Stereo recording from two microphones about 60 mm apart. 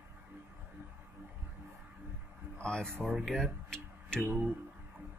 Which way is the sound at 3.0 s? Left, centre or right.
Centre.